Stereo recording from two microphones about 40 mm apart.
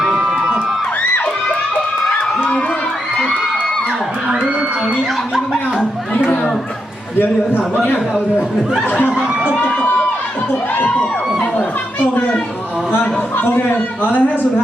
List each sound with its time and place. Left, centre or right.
0.2 s crowd: centre
4.3 s a sound: right
10.5 s a man's voice: left
12.9 s a man's voice: left
13.7 s a man's voice: left